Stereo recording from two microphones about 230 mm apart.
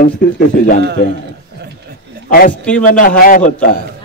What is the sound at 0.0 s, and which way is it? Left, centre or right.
Speech, left.